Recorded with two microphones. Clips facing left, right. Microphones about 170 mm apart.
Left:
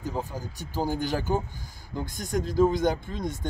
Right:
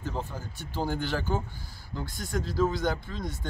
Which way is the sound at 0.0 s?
10° left (ahead or behind).